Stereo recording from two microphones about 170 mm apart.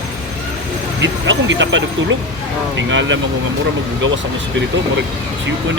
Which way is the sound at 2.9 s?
90° right.